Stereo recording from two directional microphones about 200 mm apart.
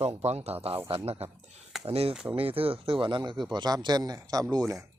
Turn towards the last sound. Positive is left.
turn(degrees=-15)  # may be behind; listen again after turning